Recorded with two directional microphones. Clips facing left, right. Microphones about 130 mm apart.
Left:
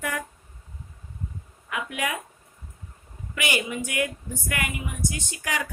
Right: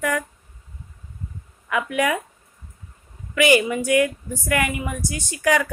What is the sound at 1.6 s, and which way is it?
Speech, 90° right.